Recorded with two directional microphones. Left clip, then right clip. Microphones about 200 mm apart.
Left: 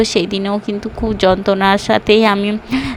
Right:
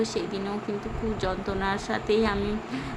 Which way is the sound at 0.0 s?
45° left (ahead or behind).